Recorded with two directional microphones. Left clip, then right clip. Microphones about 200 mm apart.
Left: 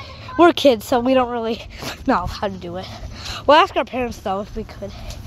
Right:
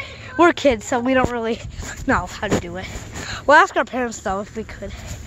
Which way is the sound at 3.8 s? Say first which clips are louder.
Right 1 dB; centre (ahead or behind).